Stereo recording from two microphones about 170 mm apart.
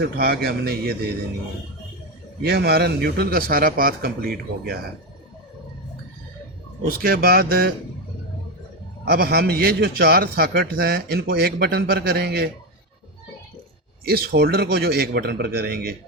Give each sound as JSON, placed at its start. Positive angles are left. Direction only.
{"t": 0.0, "sound": "a man's voice", "side_deg": -65}
{"t": 2.4, "sound": "a man's voice", "side_deg": -70}
{"t": 6.8, "sound": "a man's voice", "side_deg": -60}
{"t": 9.0, "sound": "a man's voice", "side_deg": -65}
{"t": 14.0, "sound": "a man's voice", "side_deg": -65}